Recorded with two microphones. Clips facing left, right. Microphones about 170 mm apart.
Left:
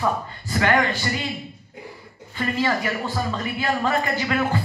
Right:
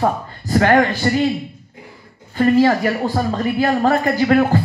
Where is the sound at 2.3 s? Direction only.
45° right (ahead or behind).